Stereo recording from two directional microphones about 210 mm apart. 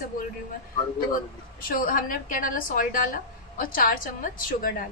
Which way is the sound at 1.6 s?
40° left (ahead or behind).